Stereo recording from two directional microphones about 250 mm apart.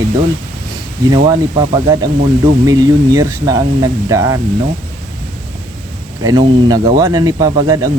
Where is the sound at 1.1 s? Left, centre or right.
Centre.